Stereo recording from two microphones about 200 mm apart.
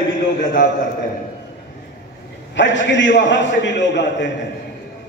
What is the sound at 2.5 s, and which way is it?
A man's voice, 65° left (ahead or behind).